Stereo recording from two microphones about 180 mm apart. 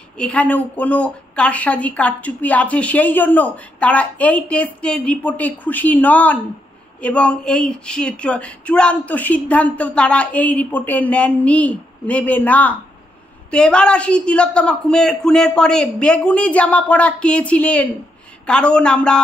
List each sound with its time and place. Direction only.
0.2 s a woman's voice: 10° left (ahead or behind)